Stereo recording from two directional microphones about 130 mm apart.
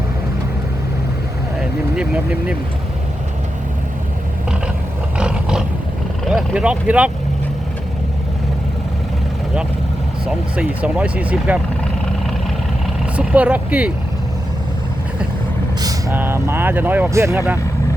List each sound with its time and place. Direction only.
2.0 s speech: 10° right (ahead or behind)
5.1 s roar: 5° right (ahead or behind)
6.2 s speech: 5° right (ahead or behind)
10.2 s speech: 10° right (ahead or behind)
13.1 s speech: 10° right (ahead or behind)
15.8 s vehicle: 25° right (ahead or behind)
16.1 s speech: 15° right (ahead or behind)